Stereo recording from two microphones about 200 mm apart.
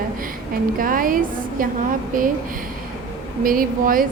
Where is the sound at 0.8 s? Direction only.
45° right (ahead or behind).